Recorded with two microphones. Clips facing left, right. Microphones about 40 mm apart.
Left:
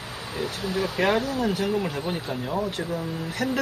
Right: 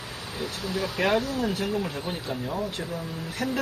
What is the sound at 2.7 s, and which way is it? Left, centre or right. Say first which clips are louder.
Speech: left 4 dB; left.